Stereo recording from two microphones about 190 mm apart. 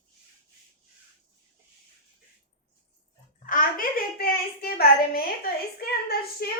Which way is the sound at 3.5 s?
45° left (ahead or behind).